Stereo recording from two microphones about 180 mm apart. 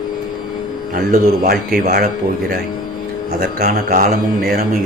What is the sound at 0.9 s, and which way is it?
A man's voice, 55° right (ahead or behind).